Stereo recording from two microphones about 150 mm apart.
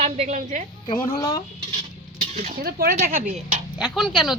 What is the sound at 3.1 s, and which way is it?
Speech, 55° right (ahead or behind).